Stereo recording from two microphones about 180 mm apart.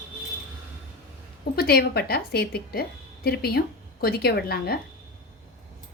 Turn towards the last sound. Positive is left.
turn(degrees=60)  # may be behind; listen again after turning